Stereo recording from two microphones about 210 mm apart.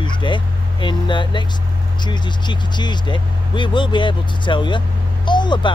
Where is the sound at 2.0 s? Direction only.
20° left (ahead or behind).